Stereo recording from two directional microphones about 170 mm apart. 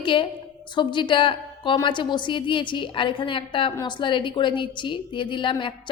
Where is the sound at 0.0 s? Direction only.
30° left (ahead or behind).